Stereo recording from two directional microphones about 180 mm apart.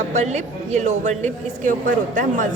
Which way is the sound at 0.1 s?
40° right (ahead or behind).